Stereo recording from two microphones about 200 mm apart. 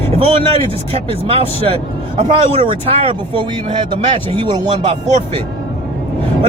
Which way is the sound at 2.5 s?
30° right (ahead or behind).